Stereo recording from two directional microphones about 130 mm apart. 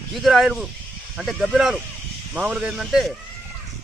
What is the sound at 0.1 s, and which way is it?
Speech, centre (ahead or behind).